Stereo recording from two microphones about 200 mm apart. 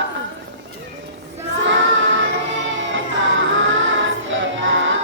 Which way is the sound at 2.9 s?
70° right (ahead or behind).